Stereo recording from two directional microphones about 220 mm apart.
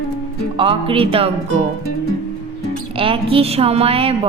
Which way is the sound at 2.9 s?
25° right (ahead or behind).